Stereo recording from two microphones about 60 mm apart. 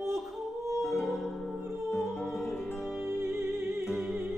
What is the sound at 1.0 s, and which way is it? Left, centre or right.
Music, centre.